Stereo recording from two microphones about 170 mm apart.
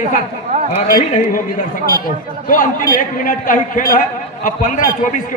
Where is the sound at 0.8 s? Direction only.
55° left (ahead or behind).